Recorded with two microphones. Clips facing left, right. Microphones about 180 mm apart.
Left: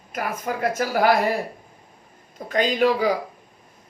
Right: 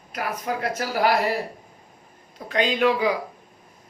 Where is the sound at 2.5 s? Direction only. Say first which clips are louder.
Left 1 dB; 40° left (ahead or behind).